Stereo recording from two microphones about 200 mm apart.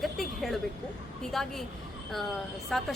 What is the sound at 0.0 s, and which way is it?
Vehicle, centre (ahead or behind).